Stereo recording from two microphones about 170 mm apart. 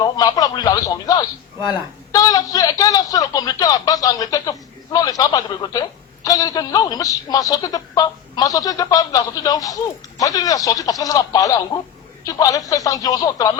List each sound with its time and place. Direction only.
0.0 s a man's voice: 20° left (ahead or behind)